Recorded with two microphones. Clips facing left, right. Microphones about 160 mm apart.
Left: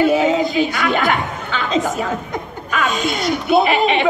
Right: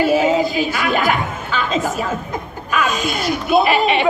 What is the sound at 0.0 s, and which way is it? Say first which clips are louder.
A woman's voice: even; 20° left (ahead or behind).